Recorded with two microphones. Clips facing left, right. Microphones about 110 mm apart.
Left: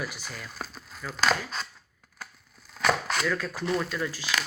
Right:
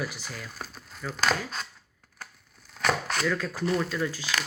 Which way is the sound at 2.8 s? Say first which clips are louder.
Left 1 dB; 15° left (ahead or behind).